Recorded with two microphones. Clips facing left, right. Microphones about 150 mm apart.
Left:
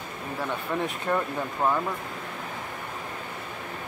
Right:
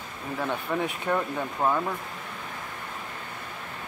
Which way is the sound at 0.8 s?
Centre (ahead or behind).